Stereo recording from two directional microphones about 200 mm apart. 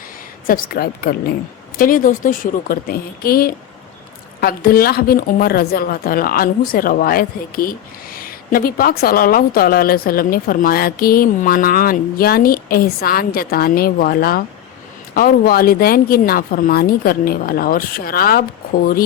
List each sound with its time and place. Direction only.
0.4 s speech: 45° left (ahead or behind)